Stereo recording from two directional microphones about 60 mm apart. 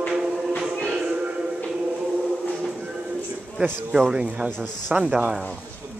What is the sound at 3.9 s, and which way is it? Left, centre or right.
Speech, centre.